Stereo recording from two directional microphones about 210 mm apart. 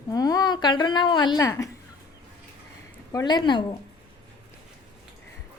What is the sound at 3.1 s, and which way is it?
Speech, 20° left (ahead or behind).